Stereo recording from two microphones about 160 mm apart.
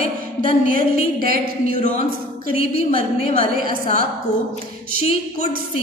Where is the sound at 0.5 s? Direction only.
60° right (ahead or behind).